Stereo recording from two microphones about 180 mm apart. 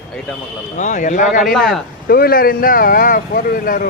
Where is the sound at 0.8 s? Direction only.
45° left (ahead or behind).